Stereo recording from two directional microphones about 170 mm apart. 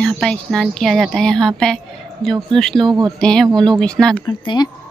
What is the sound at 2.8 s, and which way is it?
Speech, 25° right (ahead or behind).